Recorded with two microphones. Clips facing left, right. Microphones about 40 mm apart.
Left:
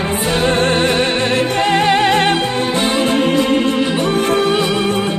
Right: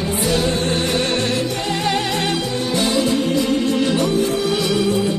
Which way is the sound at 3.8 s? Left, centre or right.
Left.